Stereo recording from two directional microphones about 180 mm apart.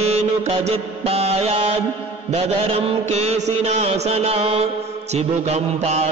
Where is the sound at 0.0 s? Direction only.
35° right (ahead or behind).